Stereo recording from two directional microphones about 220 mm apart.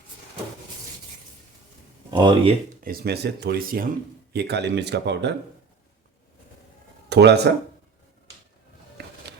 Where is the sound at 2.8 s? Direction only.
45° right (ahead or behind).